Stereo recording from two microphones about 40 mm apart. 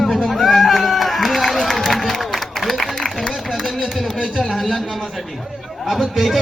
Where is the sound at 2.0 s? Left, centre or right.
Centre.